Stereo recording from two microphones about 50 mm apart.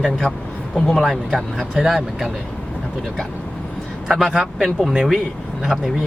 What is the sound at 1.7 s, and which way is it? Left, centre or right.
Speech, centre.